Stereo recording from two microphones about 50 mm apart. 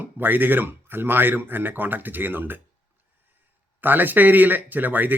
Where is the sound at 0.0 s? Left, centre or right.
Right.